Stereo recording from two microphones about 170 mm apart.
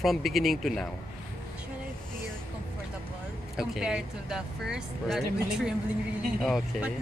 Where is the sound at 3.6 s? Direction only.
5° right (ahead or behind).